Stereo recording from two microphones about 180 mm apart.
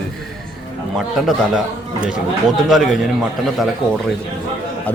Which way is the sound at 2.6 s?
Centre (ahead or behind).